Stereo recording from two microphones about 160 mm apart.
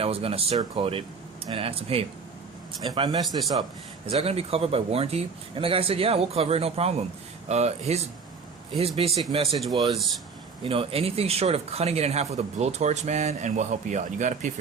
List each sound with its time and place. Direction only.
0.0 s a man's voice: 35° right (ahead or behind)